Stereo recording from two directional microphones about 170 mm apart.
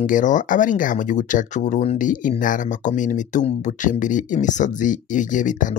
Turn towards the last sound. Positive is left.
turn(degrees=50)  # may be behind; listen again after turning